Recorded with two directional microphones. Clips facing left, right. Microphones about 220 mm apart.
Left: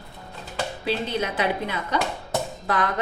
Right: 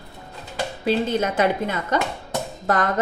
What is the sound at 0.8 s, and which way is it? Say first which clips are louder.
Speech: right 6 dB; 45° right (ahead or behind).